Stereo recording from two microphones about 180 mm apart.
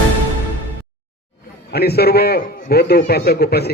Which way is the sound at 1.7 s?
60° left (ahead or behind).